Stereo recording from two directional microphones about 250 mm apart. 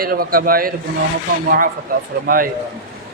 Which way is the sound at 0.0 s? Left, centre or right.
Right.